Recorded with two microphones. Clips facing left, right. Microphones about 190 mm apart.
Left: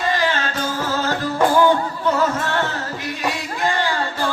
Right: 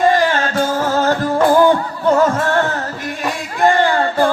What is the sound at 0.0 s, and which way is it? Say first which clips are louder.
Music: right 7 dB; 45° right (ahead or behind).